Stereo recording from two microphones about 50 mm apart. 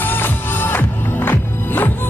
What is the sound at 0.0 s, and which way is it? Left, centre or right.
Music, left.